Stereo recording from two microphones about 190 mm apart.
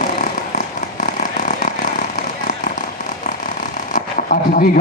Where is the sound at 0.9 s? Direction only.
45° left (ahead or behind).